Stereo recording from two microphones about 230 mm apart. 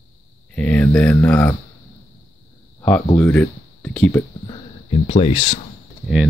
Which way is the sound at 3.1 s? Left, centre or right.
Centre.